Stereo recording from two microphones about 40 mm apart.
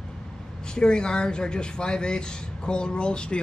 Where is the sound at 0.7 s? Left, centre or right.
Left.